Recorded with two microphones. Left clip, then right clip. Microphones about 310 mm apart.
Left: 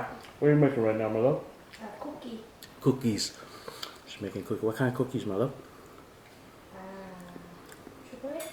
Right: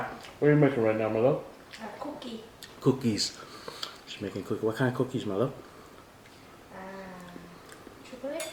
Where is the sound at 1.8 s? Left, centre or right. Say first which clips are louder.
Right 2 dB; centre.